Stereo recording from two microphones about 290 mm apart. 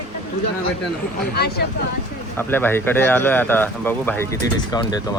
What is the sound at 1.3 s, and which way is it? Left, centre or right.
Speech, left.